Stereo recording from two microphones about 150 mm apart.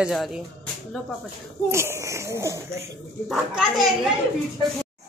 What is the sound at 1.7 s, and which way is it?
Speech, 20° right (ahead or behind).